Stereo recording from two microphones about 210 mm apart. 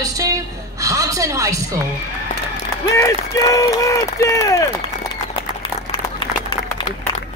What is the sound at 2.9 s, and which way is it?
Speech, 15° left (ahead or behind).